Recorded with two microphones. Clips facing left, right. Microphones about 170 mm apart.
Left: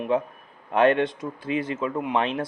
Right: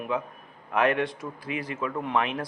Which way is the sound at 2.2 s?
30° left (ahead or behind).